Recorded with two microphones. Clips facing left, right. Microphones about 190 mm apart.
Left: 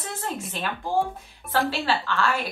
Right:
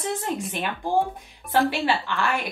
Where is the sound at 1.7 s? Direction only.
15° right (ahead or behind).